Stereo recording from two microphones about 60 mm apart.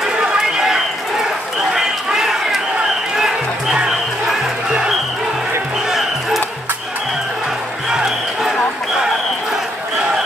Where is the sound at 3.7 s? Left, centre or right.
Centre.